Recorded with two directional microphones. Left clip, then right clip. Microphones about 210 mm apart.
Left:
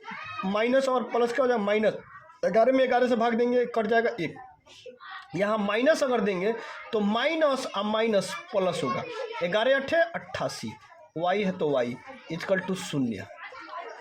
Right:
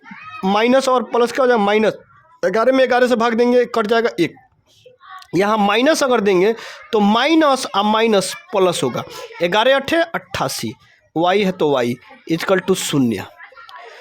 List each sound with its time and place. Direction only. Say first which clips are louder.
0.4 s speech: right 10 dB; 50° right (ahead or behind)
5.3 s speech: right 11 dB; 50° right (ahead or behind)